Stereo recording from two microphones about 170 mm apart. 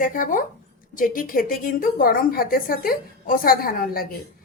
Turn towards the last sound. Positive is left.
turn(degrees=60)  # may be behind; listen again after turning